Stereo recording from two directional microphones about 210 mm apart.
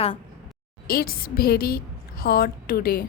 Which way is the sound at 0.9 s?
45° left (ahead or behind).